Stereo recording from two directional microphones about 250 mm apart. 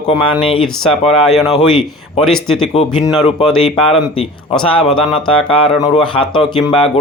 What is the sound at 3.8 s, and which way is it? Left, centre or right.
Speech, left.